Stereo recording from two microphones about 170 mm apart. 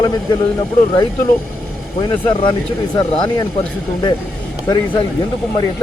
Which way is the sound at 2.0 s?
30° left (ahead or behind).